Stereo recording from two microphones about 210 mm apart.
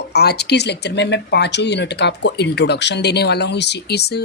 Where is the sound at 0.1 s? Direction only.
50° left (ahead or behind).